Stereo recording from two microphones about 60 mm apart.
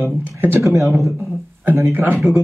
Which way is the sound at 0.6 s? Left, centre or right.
Right.